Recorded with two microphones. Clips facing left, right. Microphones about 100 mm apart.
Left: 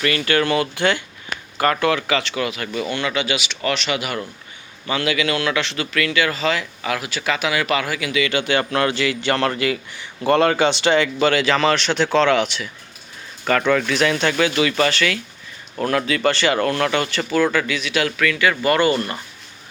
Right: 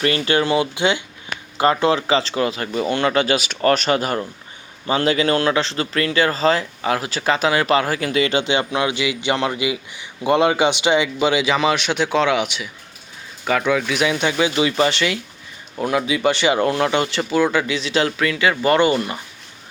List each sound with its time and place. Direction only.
0.0 s a man's voice: 30° right (ahead or behind)
15.7 s a man's voice: 10° right (ahead or behind)